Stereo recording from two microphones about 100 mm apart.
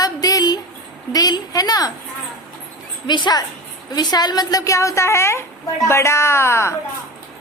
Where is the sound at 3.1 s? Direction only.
45° left (ahead or behind); by 6.7 s 25° left (ahead or behind).